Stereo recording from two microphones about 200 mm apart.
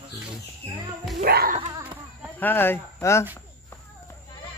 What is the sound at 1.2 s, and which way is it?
Music, 45° right (ahead or behind).